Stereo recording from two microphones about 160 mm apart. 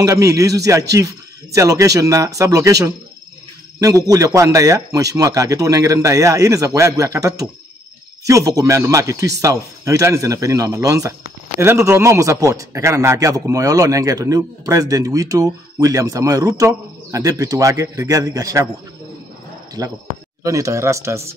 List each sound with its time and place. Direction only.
0.0 s a man's voice: 20° right (ahead or behind)
19.8 s a man's voice: 25° right (ahead or behind)